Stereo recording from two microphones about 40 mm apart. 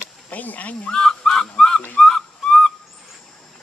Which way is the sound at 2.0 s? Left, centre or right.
Centre.